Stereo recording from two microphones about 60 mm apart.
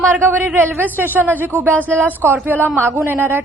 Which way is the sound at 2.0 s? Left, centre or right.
Right.